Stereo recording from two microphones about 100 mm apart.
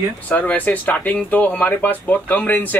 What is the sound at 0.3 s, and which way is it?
Speech, 15° left (ahead or behind).